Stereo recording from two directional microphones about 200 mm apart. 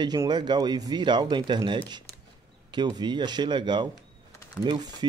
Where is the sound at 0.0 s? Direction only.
20° right (ahead or behind).